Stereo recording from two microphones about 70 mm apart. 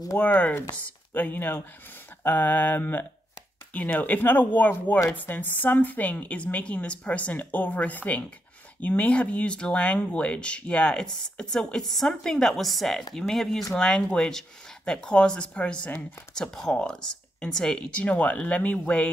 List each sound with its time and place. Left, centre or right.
0.2 s a woman's voice: left